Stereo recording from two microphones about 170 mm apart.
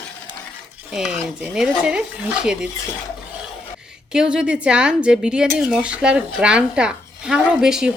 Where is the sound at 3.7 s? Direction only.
5° right (ahead or behind).